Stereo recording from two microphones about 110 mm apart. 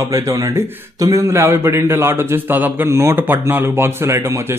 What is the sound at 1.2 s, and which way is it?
A man's voice, 20° right (ahead or behind).